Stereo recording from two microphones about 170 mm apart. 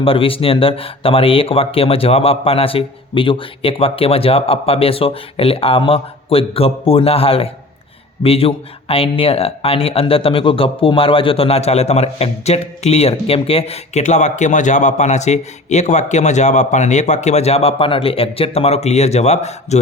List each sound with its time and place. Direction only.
0.0 s speech: 30° left (ahead or behind)